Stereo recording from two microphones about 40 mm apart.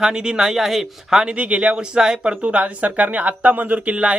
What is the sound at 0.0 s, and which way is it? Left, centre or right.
Speech, centre.